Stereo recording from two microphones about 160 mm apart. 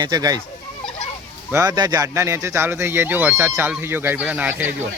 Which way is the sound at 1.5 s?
20° right (ahead or behind).